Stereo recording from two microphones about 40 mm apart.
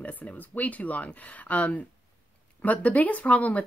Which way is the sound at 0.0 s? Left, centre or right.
Left.